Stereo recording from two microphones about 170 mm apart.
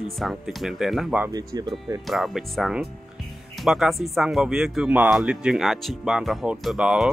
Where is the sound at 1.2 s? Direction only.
20° right (ahead or behind).